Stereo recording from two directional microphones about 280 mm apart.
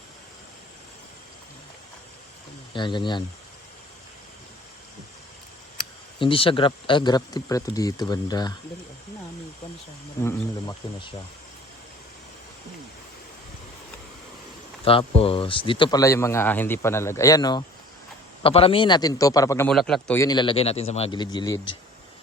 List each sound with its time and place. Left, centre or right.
2.7 s a man's voice: centre
6.1 s a man's voice: centre
10.2 s a man's voice: centre
14.8 s a man's voice: centre